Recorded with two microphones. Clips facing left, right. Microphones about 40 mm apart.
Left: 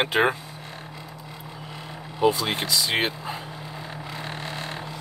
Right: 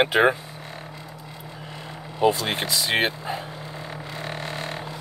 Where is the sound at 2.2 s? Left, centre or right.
Centre.